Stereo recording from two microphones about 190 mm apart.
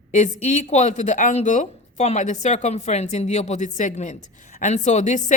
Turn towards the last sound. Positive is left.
turn(degrees=40)  # may be behind; listen again after turning